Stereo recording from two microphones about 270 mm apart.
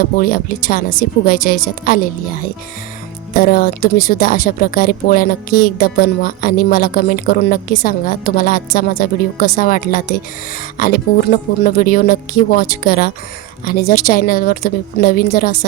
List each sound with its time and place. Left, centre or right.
0.0 s speech: left
3.3 s speech: left